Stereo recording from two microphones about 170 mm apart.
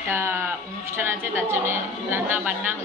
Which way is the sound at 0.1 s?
15° right (ahead or behind).